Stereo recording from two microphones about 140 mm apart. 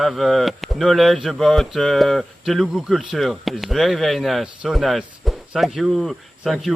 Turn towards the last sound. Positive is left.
turn(degrees=0)  # may be behind; listen again after turning